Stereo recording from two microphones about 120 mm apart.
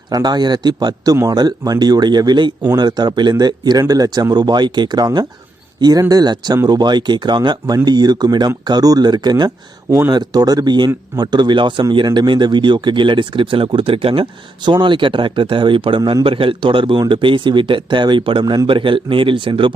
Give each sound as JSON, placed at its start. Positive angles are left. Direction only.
{"t": 0.1, "sound": "speech", "side_deg": -35}